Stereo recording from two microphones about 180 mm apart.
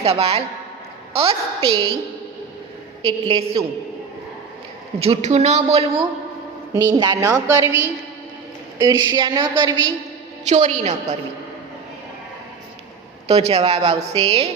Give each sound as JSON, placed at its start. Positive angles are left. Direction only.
{"t": 0.0, "sound": "a woman's voice", "side_deg": -35}
{"t": 3.0, "sound": "a woman's voice", "side_deg": -30}
{"t": 4.9, "sound": "a woman's voice", "side_deg": -35}
{"t": 6.7, "sound": "a woman's voice", "side_deg": -20}
{"t": 8.8, "sound": "a woman's voice", "side_deg": -25}
{"t": 10.4, "sound": "a woman's voice", "side_deg": -40}
{"t": 13.2, "sound": "a woman's voice", "side_deg": -35}